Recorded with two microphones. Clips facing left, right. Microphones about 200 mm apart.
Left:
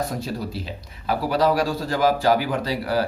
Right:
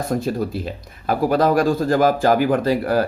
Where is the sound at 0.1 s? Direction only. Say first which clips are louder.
Right 7 dB; 50° right (ahead or behind).